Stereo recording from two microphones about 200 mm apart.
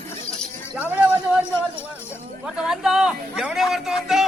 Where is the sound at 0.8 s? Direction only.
5° right (ahead or behind).